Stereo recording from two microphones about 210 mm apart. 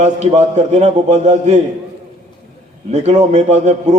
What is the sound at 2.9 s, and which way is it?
A man's voice, 35° right (ahead or behind).